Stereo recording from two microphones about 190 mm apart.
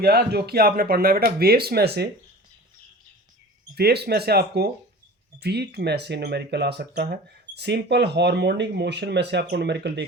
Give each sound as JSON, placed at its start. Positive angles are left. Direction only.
{"t": 0.0, "sound": "speech", "side_deg": -55}
{"t": 3.8, "sound": "speech", "side_deg": -55}